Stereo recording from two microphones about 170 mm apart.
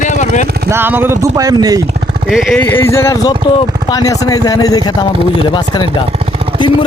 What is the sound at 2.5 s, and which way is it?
Speech, 10° left (ahead or behind).